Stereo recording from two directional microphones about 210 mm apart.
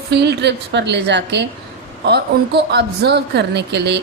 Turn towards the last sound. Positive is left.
turn(degrees=-55)  # may be behind; listen again after turning